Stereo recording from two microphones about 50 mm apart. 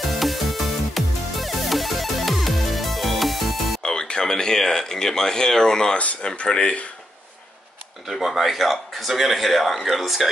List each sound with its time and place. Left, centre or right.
0.1 s music: centre
3.8 s speech: centre
8.1 s a man's voice: centre